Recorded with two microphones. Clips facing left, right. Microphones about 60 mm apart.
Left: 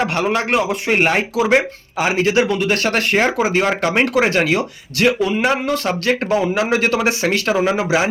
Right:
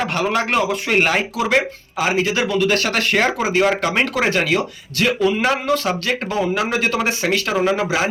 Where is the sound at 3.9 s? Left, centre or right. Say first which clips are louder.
Left 3 dB; left.